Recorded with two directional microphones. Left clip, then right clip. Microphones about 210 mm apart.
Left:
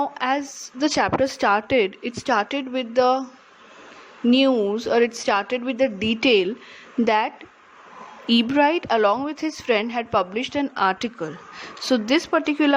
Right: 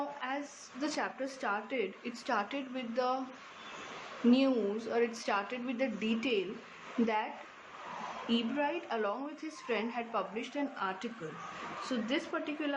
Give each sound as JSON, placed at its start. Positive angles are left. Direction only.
{"t": 0.2, "sound": "a woman's voice", "side_deg": 45}
{"t": 4.3, "sound": "a woman's voice", "side_deg": 35}
{"t": 8.3, "sound": "a woman's voice", "side_deg": 50}